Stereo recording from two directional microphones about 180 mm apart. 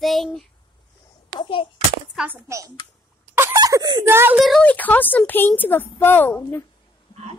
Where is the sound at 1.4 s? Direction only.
30° left (ahead or behind).